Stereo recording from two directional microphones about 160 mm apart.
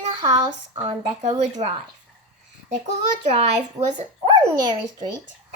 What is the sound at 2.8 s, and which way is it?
A child's voice, 45° right (ahead or behind).